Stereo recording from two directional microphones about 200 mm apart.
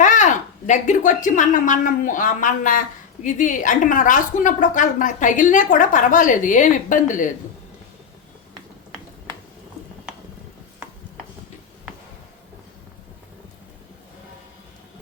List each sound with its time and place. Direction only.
0.0 s a woman's voice: 40° left (ahead or behind)